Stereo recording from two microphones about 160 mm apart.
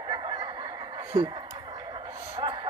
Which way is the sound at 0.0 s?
30° right (ahead or behind).